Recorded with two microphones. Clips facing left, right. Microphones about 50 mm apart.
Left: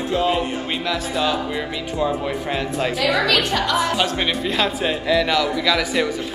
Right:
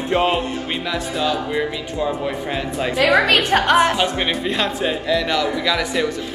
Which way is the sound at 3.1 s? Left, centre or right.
Right.